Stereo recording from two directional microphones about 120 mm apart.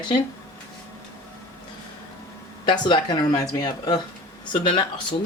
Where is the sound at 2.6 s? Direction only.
40° left (ahead or behind).